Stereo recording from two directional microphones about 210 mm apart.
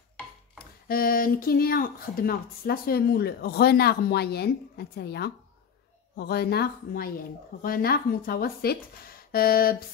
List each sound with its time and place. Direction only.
0.8 s speech: 45° left (ahead or behind)